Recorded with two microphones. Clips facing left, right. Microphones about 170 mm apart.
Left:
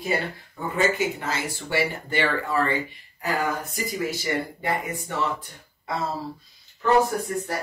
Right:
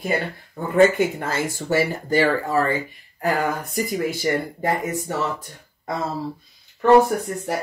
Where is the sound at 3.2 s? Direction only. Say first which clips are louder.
Right 4 dB; 55° right (ahead or behind).